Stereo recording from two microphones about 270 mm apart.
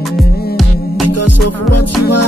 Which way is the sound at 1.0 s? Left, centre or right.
Left.